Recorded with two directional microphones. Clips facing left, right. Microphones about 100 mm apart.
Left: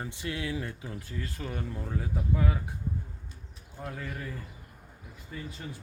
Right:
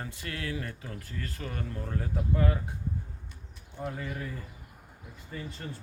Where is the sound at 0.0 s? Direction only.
20° left (ahead or behind); by 2.6 s 5° left (ahead or behind).